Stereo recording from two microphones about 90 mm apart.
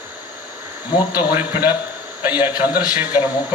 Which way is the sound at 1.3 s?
20° right (ahead or behind).